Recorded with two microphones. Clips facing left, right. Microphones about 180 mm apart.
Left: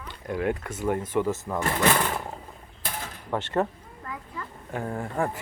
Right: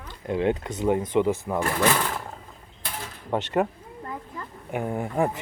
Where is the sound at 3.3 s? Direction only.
15° right (ahead or behind).